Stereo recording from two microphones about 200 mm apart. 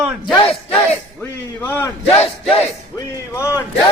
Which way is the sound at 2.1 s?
30° left (ahead or behind).